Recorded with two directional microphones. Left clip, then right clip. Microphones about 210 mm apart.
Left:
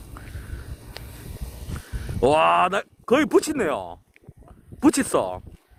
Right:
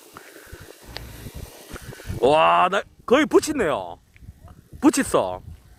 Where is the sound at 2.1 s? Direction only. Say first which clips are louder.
Right 1 dB; 5° left (ahead or behind).